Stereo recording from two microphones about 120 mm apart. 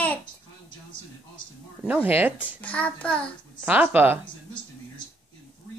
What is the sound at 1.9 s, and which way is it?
Speech, 15° right (ahead or behind).